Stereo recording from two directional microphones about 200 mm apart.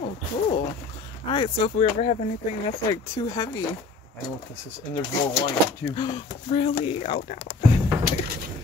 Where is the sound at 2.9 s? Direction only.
20° left (ahead or behind).